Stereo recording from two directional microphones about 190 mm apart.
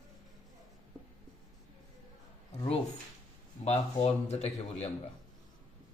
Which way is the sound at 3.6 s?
35° left (ahead or behind).